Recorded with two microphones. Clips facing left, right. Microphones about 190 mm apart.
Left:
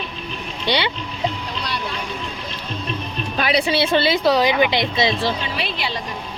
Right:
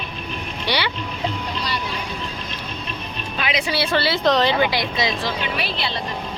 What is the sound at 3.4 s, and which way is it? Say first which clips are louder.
Music: left 5 dB; 40° left (ahead or behind).